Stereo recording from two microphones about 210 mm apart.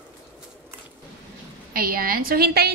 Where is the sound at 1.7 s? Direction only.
45° right (ahead or behind).